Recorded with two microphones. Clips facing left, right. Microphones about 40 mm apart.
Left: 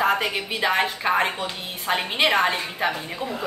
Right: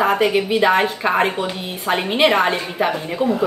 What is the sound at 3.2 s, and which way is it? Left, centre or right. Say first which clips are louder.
Speech: right 12 dB; right.